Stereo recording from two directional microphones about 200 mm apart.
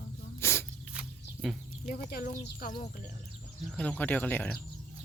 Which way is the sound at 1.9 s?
45° left (ahead or behind).